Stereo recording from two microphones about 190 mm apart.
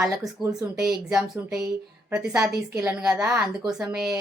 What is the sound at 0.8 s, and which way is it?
A woman's voice, 5° right (ahead or behind).